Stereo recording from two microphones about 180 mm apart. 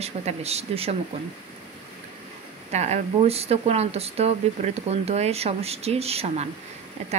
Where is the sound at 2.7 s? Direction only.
40° right (ahead or behind).